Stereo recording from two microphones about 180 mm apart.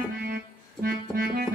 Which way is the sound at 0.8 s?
55° right (ahead or behind).